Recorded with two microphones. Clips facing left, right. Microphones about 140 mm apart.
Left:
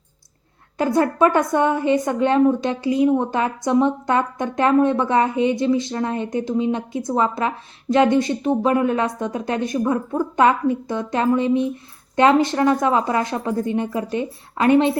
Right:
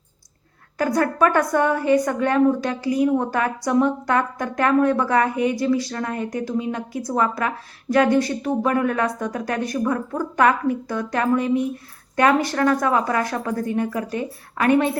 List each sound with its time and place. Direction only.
0.8 s a woman's voice: 25° left (ahead or behind)